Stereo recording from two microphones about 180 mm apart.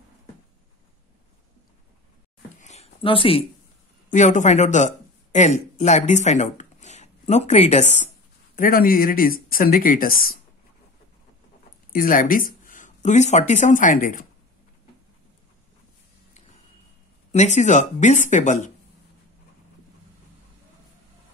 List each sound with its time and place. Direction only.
2.5 s a sound: 40° left (ahead or behind)
4.1 s speech: 45° left (ahead or behind)
8.5 s speech: 50° left (ahead or behind)
11.9 s speech: 50° left (ahead or behind)
17.3 s speech: 40° left (ahead or behind)